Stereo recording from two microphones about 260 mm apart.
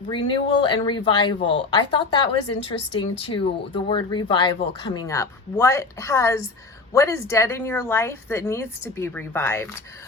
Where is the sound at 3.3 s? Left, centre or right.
Centre.